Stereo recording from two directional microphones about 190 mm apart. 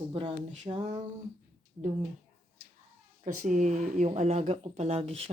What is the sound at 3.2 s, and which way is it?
Speech, 45° right (ahead or behind).